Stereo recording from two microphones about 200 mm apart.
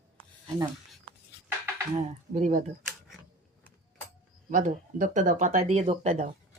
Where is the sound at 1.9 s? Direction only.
35° right (ahead or behind).